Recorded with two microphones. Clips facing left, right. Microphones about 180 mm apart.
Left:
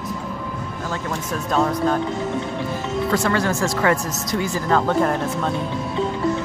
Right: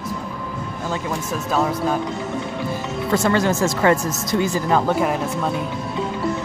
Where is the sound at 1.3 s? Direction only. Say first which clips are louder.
Left 1 dB; 5° right (ahead or behind).